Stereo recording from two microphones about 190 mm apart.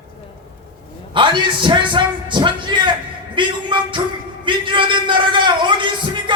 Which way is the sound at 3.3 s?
25° right (ahead or behind).